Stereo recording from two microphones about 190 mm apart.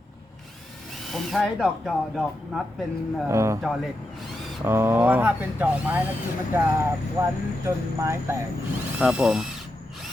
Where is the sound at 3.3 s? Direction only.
15° right (ahead or behind).